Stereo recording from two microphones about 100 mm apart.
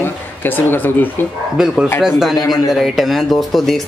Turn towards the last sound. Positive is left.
turn(degrees=0)  # may be behind; listen again after turning